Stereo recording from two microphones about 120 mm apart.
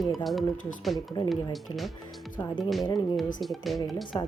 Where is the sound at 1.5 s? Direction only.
Centre (ahead or behind).